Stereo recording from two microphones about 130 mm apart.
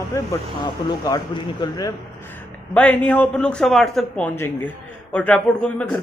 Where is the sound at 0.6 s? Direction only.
35° left (ahead or behind).